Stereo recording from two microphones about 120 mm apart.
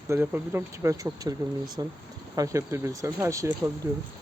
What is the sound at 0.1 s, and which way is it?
Speech, 20° right (ahead or behind).